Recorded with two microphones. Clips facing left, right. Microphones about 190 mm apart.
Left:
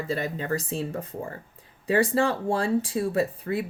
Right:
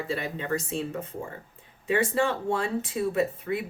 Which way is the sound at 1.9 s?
35° left (ahead or behind).